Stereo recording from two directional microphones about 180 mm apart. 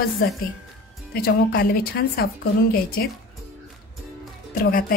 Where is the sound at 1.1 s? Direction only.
60° left (ahead or behind).